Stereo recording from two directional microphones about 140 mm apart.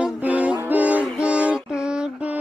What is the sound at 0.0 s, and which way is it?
Music, 10° right (ahead or behind).